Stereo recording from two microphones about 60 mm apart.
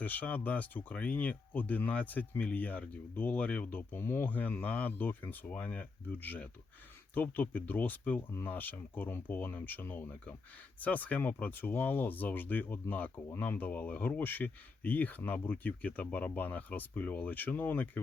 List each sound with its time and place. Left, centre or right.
0.0 s speech: left